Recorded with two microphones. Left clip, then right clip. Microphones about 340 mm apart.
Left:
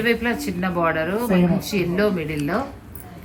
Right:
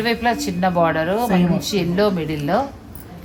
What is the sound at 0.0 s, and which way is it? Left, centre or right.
Speech, right.